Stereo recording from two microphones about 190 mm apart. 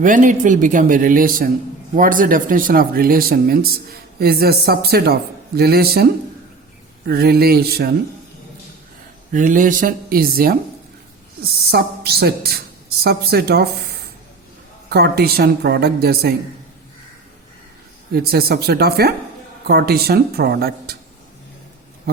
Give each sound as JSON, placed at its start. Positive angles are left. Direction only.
{"t": 0.0, "sound": "a man's voice", "side_deg": -40}
{"t": 7.1, "sound": "speech", "side_deg": -55}
{"t": 9.3, "sound": "speech", "side_deg": -45}
{"t": 11.6, "sound": "a woman's voice", "side_deg": -55}
{"t": 14.8, "sound": "a man's voice", "side_deg": -55}
{"t": 18.1, "sound": "a man's voice", "side_deg": -55}